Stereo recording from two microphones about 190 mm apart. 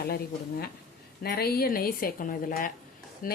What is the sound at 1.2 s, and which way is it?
Speech, 55° left (ahead or behind).